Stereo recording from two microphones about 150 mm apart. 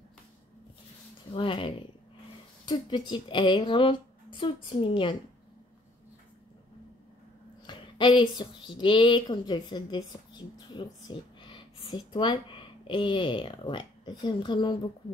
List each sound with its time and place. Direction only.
1.3 s speech: 35° left (ahead or behind)
7.6 s speech: 30° left (ahead or behind)